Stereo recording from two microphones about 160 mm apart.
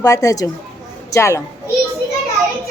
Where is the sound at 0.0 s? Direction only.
20° left (ahead or behind).